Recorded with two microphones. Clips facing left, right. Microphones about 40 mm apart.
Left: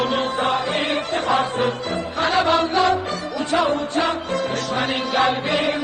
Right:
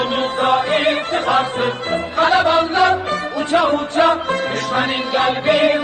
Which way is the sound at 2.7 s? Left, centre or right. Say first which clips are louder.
Right 4 dB; right.